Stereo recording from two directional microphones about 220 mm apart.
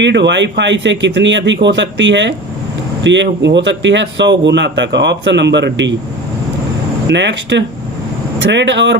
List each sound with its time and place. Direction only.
0.0 s a man's voice: 55° right (ahead or behind)
7.1 s a man's voice: 55° right (ahead or behind)